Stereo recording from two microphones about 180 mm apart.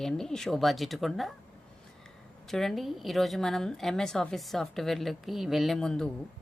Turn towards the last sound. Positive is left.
turn(degrees=5)  # may be behind; listen again after turning